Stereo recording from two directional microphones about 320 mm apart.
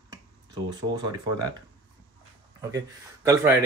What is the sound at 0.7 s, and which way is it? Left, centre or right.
Speech, centre.